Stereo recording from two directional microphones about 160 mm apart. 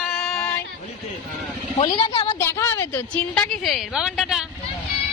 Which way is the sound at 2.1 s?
35° left (ahead or behind).